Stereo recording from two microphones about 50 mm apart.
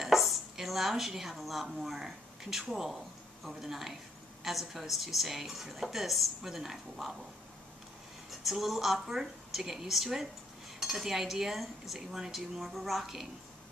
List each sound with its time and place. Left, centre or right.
0.0 s a woman's voice: centre
8.5 s a woman's voice: centre